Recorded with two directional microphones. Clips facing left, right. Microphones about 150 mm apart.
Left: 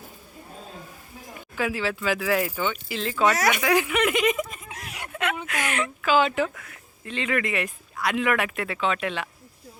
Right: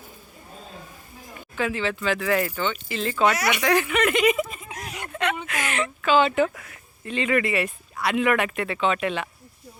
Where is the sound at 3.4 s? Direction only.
45° left (ahead or behind).